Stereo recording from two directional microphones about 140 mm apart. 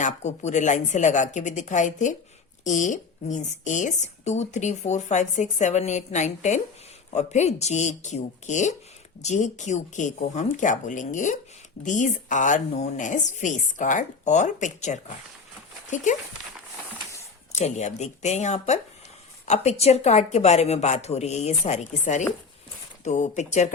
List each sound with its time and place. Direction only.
0.0 s speech: 55° left (ahead or behind)
17.5 s a woman's voice: 55° left (ahead or behind)